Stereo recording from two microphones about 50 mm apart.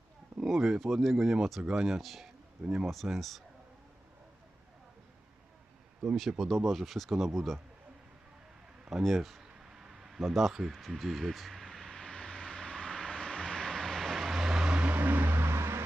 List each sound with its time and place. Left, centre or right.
0.4 s speech: centre
6.1 s speech: centre
8.9 s a sound: centre
10.7 s vehicle: centre
14.8 s vehicle: right
15.4 s vehicle: right